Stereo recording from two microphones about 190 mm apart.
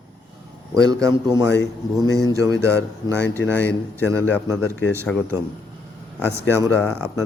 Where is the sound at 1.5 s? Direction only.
20° left (ahead or behind).